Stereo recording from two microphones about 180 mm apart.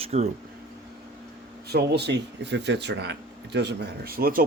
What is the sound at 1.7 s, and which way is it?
Speech, 65° right (ahead or behind).